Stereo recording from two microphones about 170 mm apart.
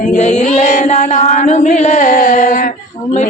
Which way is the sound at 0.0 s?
45° left (ahead or behind).